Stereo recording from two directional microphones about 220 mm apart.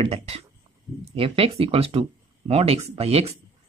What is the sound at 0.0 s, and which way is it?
Speech, 25° right (ahead or behind).